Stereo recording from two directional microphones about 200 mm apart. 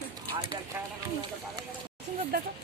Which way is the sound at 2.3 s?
50° right (ahead or behind).